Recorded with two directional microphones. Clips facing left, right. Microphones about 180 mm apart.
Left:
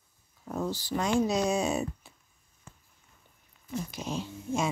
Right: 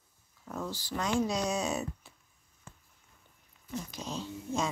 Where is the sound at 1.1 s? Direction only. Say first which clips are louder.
Left 4 dB; 25° left (ahead or behind).